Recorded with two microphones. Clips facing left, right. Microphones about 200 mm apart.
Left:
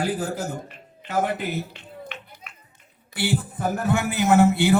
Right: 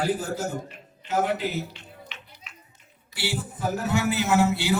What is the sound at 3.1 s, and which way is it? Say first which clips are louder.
A man's voice: left 6 dB; 55° left (ahead or behind).